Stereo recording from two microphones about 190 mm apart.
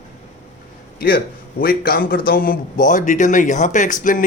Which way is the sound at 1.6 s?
50° left (ahead or behind).